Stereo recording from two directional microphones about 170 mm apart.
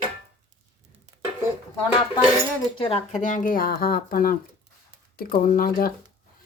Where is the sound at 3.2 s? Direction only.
50° left (ahead or behind).